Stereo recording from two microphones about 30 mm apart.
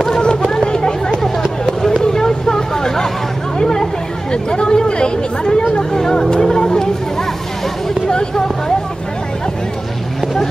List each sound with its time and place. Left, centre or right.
0.2 s a sound: left
2.1 s vehicle: centre
3.5 s chatter: left
8.1 s vehicle: left